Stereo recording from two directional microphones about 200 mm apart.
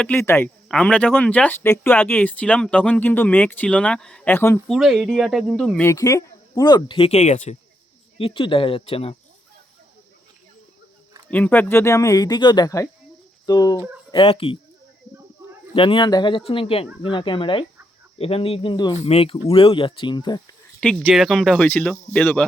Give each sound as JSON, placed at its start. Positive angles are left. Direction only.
{"t": 0.0, "sound": "speech", "side_deg": 10}
{"t": 4.7, "sound": "speech", "side_deg": 0}
{"t": 5.9, "sound": "speech", "side_deg": 15}
{"t": 8.2, "sound": "speech", "side_deg": 25}
{"t": 11.3, "sound": "speech", "side_deg": 10}
{"t": 15.7, "sound": "speech", "side_deg": 25}
{"t": 20.8, "sound": "speech", "side_deg": 0}